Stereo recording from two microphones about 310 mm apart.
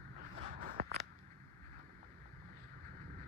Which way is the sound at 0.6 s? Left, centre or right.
Right.